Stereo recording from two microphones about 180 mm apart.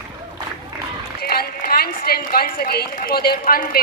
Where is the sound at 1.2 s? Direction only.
60° left (ahead or behind).